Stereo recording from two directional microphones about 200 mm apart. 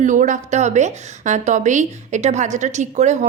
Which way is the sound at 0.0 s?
40° right (ahead or behind).